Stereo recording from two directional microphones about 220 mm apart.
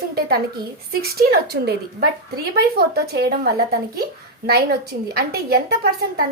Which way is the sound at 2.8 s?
45° right (ahead or behind).